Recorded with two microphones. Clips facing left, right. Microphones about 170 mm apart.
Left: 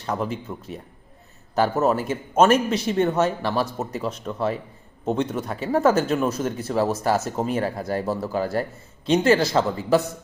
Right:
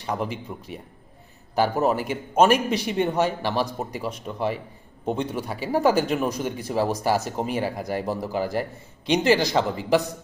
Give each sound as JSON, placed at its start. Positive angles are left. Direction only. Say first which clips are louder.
{"t": 0.0, "sound": "speech", "louder": "left 1 dB", "side_deg": -15}
{"t": 1.5, "sound": "speech", "louder": "left 1 dB", "side_deg": -15}
{"t": 5.0, "sound": "speech", "louder": "left 2 dB", "side_deg": -10}